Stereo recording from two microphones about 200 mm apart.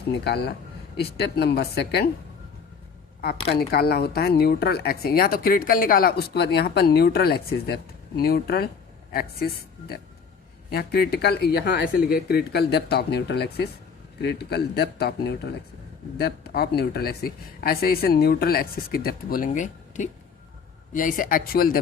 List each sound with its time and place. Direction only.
0.3 s speech: 50° left (ahead or behind)
3.3 s speech: 30° left (ahead or behind)
3.6 s speech: 50° left (ahead or behind)